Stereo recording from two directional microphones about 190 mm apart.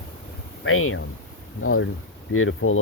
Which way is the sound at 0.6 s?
90° left.